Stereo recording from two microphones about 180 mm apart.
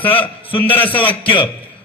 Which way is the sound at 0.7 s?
10° left (ahead or behind).